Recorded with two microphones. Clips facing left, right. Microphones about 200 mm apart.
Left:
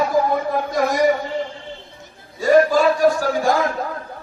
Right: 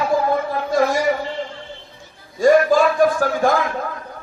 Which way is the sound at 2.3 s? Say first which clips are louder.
Right 1 dB; 45° right (ahead or behind).